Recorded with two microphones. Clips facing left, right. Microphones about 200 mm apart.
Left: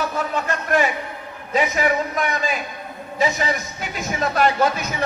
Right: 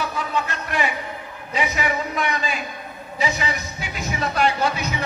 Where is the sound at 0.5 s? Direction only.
45° left (ahead or behind).